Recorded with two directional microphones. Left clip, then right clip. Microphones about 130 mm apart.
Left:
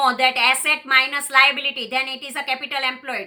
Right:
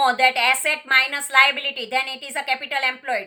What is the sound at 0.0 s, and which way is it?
A woman's voice, 35° right (ahead or behind).